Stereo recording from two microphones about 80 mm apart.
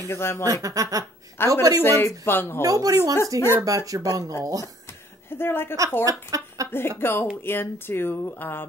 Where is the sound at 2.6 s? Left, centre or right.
Right.